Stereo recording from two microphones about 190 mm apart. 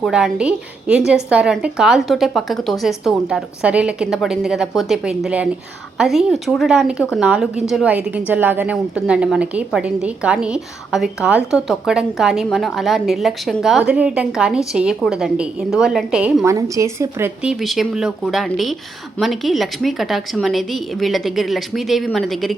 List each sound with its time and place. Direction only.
0.0 s a woman's voice: 5° right (ahead or behind)